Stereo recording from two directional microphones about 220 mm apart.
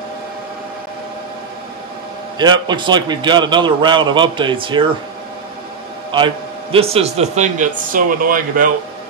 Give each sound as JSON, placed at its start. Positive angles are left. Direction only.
{"t": 2.3, "sound": "a man's voice", "side_deg": -20}
{"t": 6.1, "sound": "a man's voice", "side_deg": -25}